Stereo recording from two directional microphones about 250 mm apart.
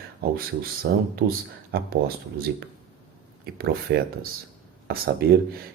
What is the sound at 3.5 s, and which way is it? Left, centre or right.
Speech, right.